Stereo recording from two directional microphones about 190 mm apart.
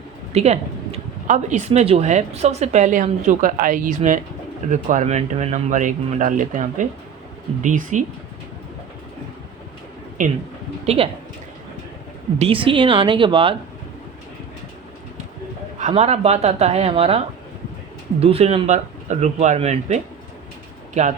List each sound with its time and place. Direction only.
0.3 s speech: 35° right (ahead or behind)
10.2 s speech: 40° right (ahead or behind)
10.8 s speech: 30° right (ahead or behind)
12.4 s a woman's voice: 30° right (ahead or behind)
15.9 s speech: 35° right (ahead or behind)